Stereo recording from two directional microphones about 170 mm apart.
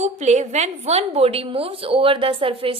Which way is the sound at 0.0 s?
40° right (ahead or behind).